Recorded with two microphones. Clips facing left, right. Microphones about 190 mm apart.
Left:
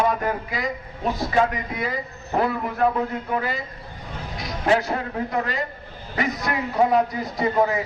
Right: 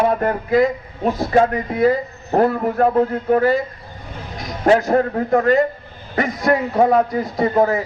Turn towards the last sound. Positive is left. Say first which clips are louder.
# right 5 dB
turn(degrees=-45)  # may be behind; listen again after turning